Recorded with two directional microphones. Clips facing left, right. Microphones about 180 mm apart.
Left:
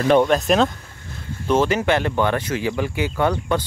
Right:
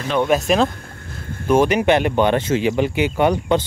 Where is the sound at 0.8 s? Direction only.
55° right (ahead or behind).